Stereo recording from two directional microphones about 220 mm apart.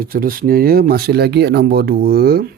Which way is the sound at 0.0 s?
40° right (ahead or behind).